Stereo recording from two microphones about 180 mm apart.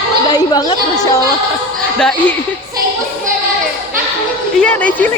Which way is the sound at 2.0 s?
5° left (ahead or behind).